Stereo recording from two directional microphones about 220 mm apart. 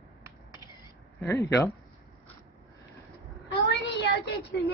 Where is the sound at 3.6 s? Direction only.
50° left (ahead or behind).